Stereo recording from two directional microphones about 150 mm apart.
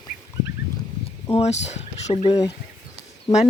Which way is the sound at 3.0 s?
45° left (ahead or behind).